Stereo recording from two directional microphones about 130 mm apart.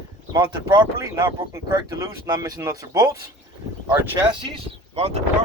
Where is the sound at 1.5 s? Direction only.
25° right (ahead or behind).